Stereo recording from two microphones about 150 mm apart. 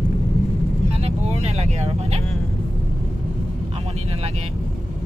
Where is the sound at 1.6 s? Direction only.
45° right (ahead or behind).